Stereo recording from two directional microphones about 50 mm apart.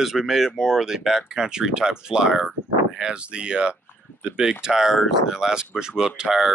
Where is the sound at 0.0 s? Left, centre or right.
Centre.